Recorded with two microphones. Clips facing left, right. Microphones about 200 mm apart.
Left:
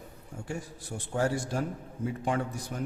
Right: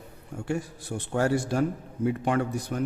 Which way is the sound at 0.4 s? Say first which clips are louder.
Right 8 dB; 65° right (ahead or behind).